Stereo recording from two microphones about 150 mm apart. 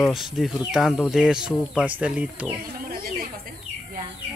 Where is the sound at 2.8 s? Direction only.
80° right.